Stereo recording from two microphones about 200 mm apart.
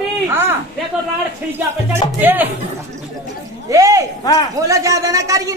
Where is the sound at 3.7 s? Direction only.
15° right (ahead or behind).